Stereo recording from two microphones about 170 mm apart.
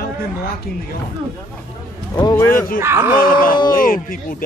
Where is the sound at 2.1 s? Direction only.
20° left (ahead or behind).